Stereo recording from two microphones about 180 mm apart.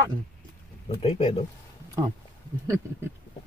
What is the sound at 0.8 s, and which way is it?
Speech, 35° left (ahead or behind).